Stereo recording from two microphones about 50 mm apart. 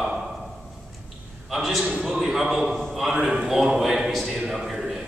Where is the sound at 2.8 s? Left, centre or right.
Centre.